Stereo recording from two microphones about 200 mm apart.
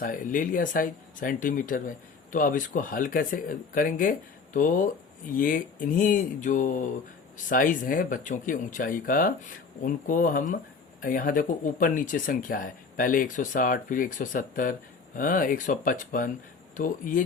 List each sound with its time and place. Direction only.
0.0 s speech: 40° left (ahead or behind)